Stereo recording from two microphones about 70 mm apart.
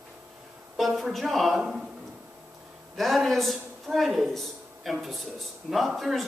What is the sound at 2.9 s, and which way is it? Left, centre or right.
A man's voice, centre.